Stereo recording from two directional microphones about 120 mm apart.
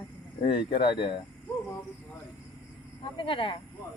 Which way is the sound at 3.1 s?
45° left (ahead or behind).